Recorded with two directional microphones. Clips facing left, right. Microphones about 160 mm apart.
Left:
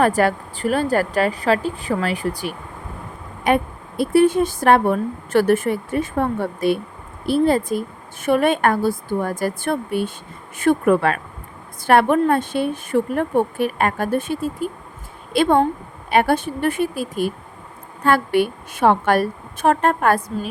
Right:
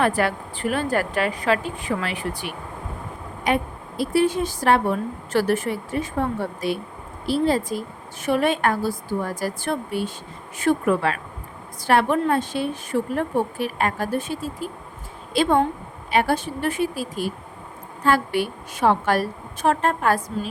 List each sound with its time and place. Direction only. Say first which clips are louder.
0.0 s a woman's voice: left 4 dB; 40° left (ahead or behind)
3.4 s speech: left 4 dB; 55° left (ahead or behind)